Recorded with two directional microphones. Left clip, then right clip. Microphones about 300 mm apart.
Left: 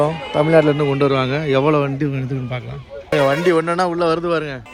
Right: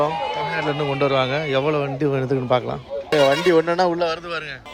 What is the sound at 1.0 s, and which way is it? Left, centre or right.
A man's voice, centre.